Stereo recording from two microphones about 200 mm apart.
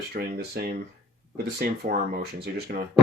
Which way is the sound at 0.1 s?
50° right (ahead or behind).